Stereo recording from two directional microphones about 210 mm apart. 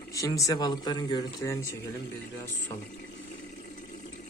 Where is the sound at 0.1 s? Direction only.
15° left (ahead or behind).